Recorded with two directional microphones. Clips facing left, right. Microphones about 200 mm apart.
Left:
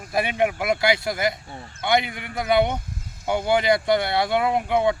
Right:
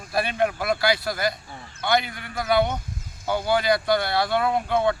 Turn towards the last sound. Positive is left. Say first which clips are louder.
# left 1 dB
turn(degrees=15)  # may be behind; listen again after turning